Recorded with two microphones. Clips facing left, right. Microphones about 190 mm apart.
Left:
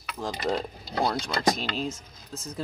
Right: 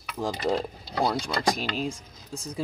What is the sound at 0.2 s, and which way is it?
Speech, 10° right (ahead or behind).